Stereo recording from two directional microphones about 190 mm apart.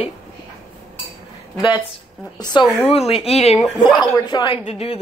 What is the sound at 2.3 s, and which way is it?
Speech, 20° left (ahead or behind).